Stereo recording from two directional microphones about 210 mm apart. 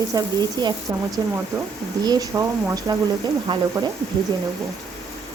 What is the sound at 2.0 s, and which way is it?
Stir, 20° right (ahead or behind).